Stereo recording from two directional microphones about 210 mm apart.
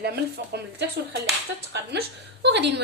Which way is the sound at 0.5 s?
50° right (ahead or behind).